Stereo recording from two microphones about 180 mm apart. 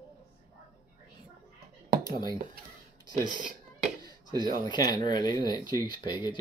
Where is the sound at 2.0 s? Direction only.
20° left (ahead or behind).